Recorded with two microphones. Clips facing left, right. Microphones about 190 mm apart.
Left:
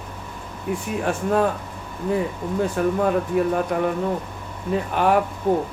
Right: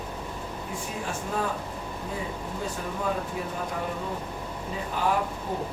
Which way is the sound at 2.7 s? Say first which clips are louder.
Left 10 dB; 65° left (ahead or behind).